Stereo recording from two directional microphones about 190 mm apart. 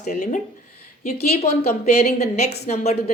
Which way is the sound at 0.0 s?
40° left (ahead or behind).